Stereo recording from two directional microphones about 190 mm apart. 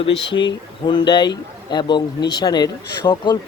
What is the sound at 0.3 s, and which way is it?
A man's voice, 25° left (ahead or behind).